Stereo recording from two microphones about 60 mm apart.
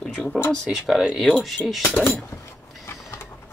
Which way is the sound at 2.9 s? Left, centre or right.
Left.